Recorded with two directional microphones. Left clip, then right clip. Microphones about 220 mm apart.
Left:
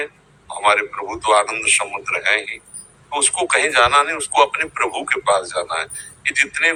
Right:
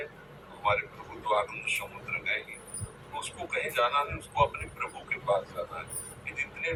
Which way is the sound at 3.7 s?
50° left (ahead or behind).